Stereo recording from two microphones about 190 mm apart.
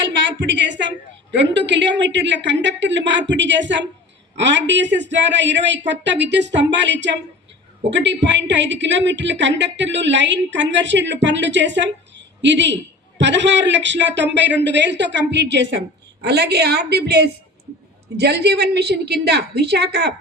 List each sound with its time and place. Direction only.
0.3 s a sound: 70° right (ahead or behind)
1.3 s a woman's voice: 65° right (ahead or behind)
16.2 s a woman's voice: 60° right (ahead or behind)